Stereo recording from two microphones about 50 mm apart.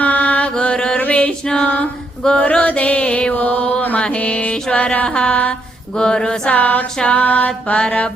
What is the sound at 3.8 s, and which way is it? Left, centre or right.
Music, left.